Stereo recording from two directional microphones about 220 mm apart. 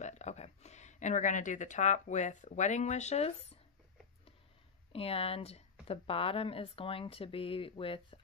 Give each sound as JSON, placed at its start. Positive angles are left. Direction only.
{"t": 0.0, "sound": "speech", "side_deg": 30}
{"t": 4.9, "sound": "a woman's voice", "side_deg": 25}